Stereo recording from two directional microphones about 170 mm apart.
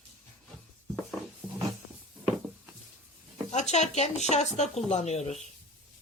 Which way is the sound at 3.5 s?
40° left (ahead or behind).